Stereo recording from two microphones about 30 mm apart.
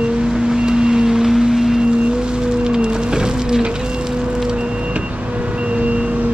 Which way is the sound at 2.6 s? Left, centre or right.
Right.